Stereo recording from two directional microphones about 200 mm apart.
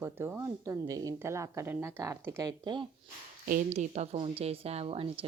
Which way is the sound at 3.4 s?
40° right (ahead or behind).